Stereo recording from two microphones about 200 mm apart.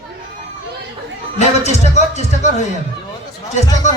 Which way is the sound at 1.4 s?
35° left (ahead or behind).